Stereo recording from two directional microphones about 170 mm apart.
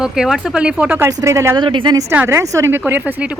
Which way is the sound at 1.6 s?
30° right (ahead or behind).